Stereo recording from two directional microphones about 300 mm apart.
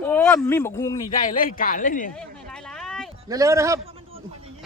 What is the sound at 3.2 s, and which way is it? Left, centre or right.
Speech, centre.